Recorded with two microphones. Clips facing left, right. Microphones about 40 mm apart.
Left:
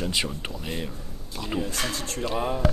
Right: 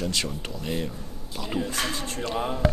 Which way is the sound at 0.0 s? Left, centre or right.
Centre.